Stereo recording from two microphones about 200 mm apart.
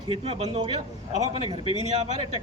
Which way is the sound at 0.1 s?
30° right (ahead or behind).